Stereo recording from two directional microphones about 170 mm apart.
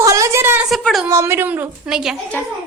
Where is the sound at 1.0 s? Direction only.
15° right (ahead or behind).